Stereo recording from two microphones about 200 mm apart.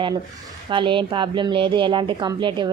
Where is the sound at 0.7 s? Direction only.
25° right (ahead or behind).